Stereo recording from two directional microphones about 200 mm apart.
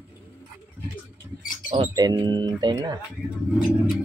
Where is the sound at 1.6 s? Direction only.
25° right (ahead or behind).